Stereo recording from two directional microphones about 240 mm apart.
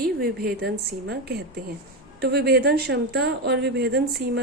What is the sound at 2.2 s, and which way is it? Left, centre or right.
A woman's voice, right.